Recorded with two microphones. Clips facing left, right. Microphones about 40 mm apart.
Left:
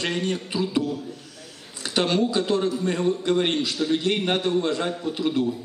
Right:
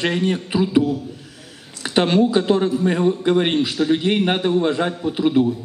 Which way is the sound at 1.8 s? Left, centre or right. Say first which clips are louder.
Right 6 dB; right.